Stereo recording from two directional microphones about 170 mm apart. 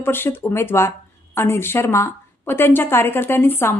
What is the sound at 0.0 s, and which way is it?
A woman's voice, 15° left (ahead or behind).